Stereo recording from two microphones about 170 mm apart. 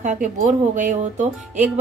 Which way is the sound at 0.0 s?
45° right (ahead or behind).